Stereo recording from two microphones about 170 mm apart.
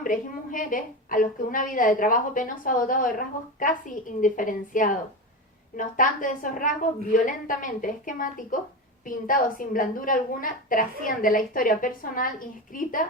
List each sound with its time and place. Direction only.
0.0 s a woman's voice: 55° left (ahead or behind)